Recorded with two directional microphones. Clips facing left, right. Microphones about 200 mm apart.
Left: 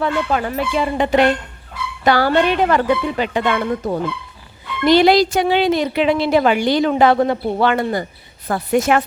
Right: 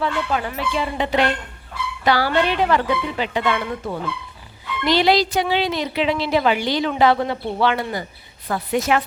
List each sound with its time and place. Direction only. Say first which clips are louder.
0.0 s a woman's voice: left 4 dB; 50° left (ahead or behind)